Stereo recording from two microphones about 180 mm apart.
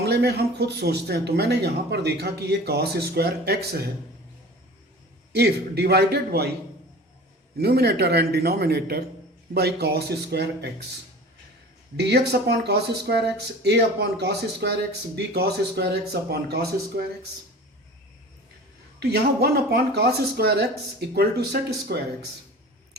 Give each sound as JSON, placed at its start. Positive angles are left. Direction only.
{"t": 0.0, "sound": "speech", "side_deg": -65}
{"t": 5.3, "sound": "speech", "side_deg": -65}
{"t": 7.6, "sound": "speech", "side_deg": -60}
{"t": 11.9, "sound": "speech", "side_deg": -70}
{"t": 18.9, "sound": "speech", "side_deg": -65}